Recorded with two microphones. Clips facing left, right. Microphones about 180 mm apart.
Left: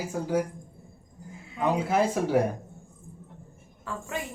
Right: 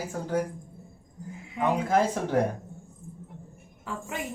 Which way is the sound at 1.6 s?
10° left (ahead or behind).